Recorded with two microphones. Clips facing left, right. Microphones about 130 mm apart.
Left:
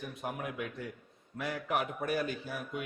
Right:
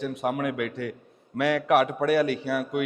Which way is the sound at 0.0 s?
85° right.